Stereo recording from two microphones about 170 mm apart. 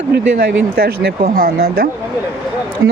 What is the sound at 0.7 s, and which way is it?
Speech, 70° right (ahead or behind).